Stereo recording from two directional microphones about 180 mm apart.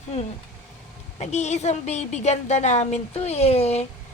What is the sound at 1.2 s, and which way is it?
A woman's voice, 40° left (ahead or behind).